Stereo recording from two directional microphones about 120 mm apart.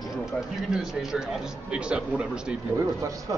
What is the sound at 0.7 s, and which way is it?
A man's voice, 5° right (ahead or behind).